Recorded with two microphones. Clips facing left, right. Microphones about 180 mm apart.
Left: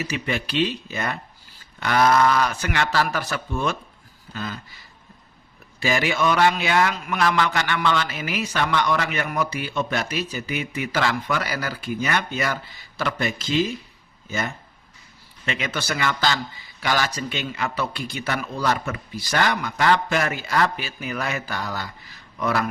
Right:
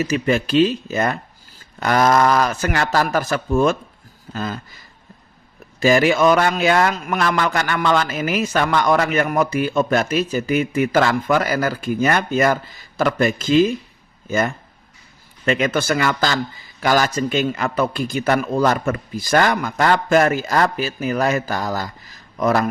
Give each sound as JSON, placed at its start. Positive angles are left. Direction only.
{"t": 0.0, "sound": "a man's voice", "side_deg": -45}
{"t": 5.8, "sound": "a man's voice", "side_deg": -45}